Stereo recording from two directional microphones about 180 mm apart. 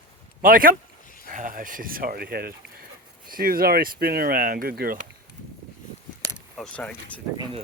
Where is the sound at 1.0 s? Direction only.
50° left (ahead or behind).